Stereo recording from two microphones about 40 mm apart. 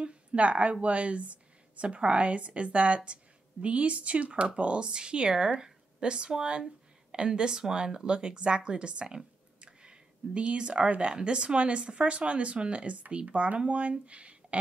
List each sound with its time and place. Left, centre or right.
0.0 s a woman's voice: right